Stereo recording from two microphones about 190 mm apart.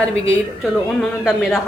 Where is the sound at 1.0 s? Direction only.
Centre (ahead or behind).